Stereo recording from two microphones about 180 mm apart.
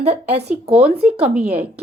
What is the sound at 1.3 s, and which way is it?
Speech, 5° right (ahead or behind).